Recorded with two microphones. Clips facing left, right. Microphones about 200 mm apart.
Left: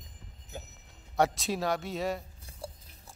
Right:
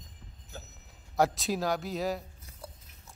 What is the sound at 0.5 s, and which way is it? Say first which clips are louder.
Speech: left 3 dB; 20° left (ahead or behind).